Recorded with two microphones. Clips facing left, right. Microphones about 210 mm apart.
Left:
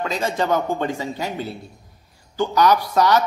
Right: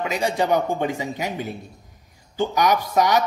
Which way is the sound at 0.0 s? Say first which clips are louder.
Even; 15° right (ahead or behind).